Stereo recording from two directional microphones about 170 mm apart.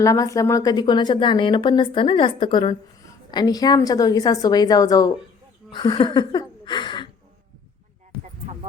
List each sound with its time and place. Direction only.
0.0 s a woman's voice: 20° left (ahead or behind)